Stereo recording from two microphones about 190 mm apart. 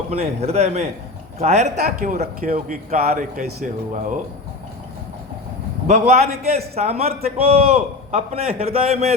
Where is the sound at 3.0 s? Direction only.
35° right (ahead or behind).